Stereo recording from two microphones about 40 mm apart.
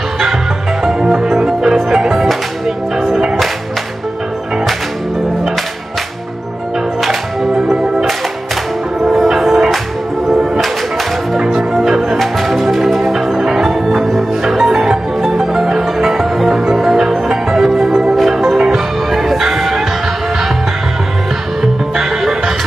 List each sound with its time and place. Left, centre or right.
1.0 s music: centre
9.0 s music: centre
9.3 s music: centre
11.3 s music: centre
12.2 s music: centre